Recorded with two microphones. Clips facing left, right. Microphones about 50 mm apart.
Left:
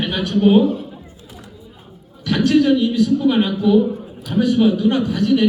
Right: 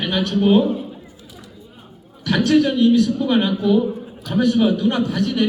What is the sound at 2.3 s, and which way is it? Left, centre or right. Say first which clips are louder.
A man's voice: left 2 dB; centre.